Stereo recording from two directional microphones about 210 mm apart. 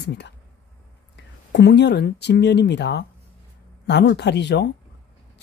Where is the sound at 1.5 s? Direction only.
55° left (ahead or behind).